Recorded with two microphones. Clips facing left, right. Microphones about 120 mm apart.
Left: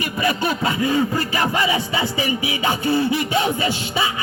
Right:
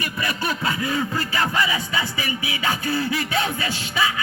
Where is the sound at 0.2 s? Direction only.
25° left (ahead or behind).